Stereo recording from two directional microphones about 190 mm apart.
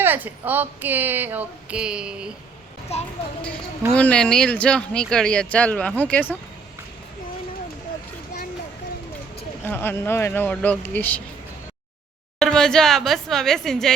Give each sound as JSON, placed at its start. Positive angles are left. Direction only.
{"t": 0.0, "sound": "a woman's voice", "side_deg": -10}
{"t": 2.9, "sound": "speech", "side_deg": 35}
{"t": 3.9, "sound": "speech", "side_deg": 5}
{"t": 9.6, "sound": "speech", "side_deg": 10}
{"t": 12.4, "sound": "a woman's voice", "side_deg": 5}